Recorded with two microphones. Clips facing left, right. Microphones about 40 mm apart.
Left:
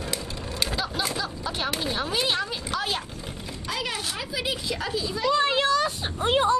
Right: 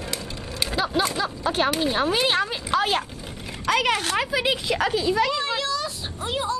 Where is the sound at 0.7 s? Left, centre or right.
Right.